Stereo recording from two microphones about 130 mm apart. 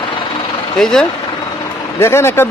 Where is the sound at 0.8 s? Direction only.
5° left (ahead or behind).